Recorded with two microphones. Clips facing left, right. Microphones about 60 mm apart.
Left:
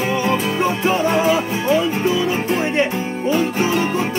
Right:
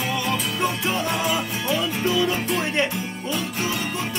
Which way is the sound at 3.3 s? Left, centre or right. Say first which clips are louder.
Left 9 dB; left.